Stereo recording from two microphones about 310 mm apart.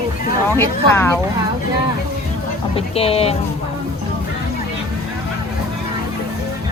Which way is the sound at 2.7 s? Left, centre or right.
Centre.